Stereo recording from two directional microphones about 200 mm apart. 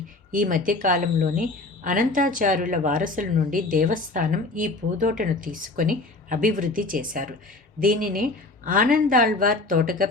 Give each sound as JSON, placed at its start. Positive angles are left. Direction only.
{"t": 0.3, "sound": "a woman's voice", "side_deg": -40}